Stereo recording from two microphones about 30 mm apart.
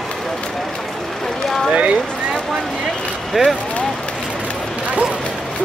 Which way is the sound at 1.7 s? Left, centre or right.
Right.